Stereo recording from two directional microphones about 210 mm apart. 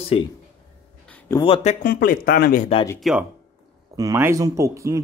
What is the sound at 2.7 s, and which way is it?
Speech, 20° left (ahead or behind).